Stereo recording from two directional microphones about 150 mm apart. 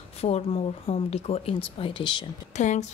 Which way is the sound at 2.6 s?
50° left (ahead or behind).